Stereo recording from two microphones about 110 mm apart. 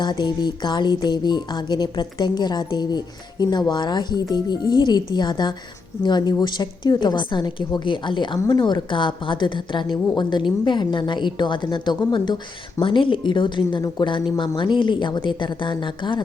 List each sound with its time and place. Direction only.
0.0 s a woman's voice: 40° left (ahead or behind)